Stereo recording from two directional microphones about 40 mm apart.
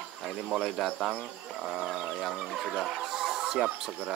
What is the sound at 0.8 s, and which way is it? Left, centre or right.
Speech, centre.